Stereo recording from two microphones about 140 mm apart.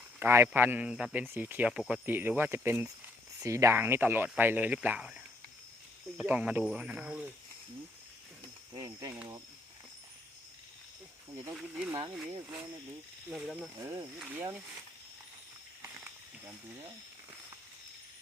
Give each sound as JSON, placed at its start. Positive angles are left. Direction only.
{"t": 0.2, "sound": "speech", "side_deg": -15}
{"t": 8.7, "sound": "speech", "side_deg": -25}
{"t": 11.5, "sound": "speech", "side_deg": -10}
{"t": 12.2, "sound": "speech", "side_deg": -25}
{"t": 13.3, "sound": "speech", "side_deg": -5}
{"t": 13.7, "sound": "speech", "side_deg": -25}
{"t": 15.8, "sound": "snake", "side_deg": -15}